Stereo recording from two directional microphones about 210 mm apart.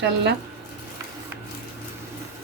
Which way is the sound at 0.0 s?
55° right (ahead or behind).